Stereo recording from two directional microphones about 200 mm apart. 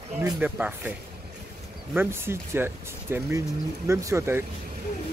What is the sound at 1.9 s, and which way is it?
Speech, 10° right (ahead or behind).